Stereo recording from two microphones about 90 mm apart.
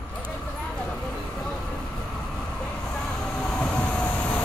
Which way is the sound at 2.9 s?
10° left (ahead or behind).